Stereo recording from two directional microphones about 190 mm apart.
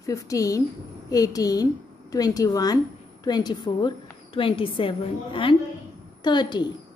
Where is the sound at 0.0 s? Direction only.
15° left (ahead or behind).